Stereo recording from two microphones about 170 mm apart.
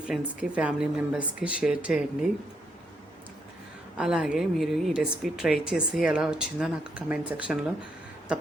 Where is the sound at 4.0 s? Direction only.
5° right (ahead or behind).